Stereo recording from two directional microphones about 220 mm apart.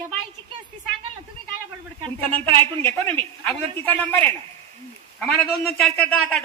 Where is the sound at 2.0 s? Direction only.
25° right (ahead or behind).